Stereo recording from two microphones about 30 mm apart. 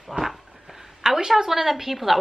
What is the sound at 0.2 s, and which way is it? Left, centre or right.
Speech, centre.